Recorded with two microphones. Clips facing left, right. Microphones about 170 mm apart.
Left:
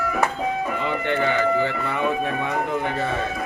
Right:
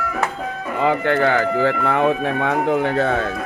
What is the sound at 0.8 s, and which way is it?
Speech, 90° right.